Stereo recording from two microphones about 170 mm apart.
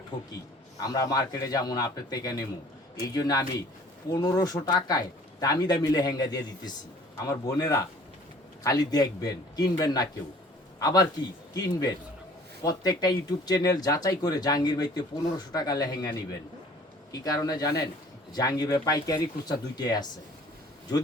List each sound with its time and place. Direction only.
0.8 s a man's voice: 20° left (ahead or behind)